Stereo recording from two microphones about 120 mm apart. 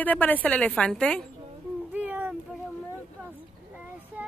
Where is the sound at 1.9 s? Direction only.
15° right (ahead or behind).